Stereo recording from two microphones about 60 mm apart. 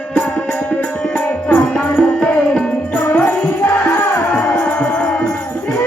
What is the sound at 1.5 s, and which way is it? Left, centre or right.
Music, left.